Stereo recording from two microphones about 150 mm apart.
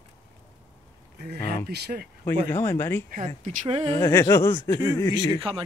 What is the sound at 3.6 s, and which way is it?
Speech, 40° right (ahead or behind).